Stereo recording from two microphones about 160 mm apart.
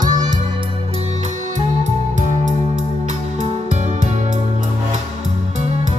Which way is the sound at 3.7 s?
45° right (ahead or behind).